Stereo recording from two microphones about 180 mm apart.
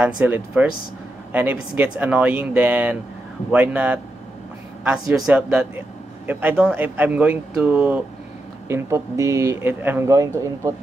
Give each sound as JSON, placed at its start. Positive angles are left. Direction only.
{"t": 0.0, "sound": "a man's voice", "side_deg": -10}
{"t": 5.2, "sound": "a man's voice", "side_deg": -5}